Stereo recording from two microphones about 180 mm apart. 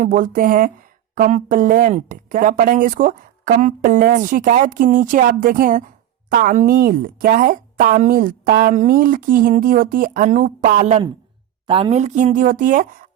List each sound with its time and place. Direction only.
0.0 s speech: 50° right (ahead or behind)
11.6 s a woman's voice: 30° right (ahead or behind); by 13.1 s 50° right (ahead or behind)